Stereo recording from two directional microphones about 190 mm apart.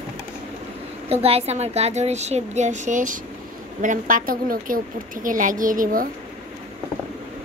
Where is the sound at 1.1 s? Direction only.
30° right (ahead or behind).